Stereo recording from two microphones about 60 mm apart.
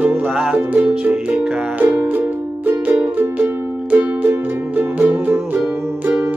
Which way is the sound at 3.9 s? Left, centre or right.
Right.